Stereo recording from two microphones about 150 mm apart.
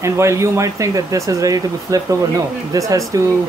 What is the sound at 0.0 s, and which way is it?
Speech, 20° right (ahead or behind).